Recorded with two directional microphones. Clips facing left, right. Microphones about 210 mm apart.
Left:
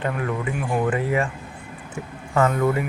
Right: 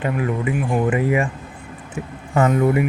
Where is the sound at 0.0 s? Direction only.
15° right (ahead or behind).